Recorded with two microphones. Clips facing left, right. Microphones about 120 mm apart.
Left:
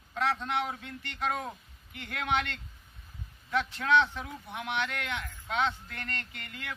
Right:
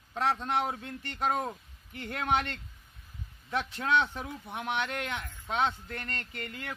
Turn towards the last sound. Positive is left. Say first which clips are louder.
# right 2 dB
turn(degrees=-35)  # may be behind; listen again after turning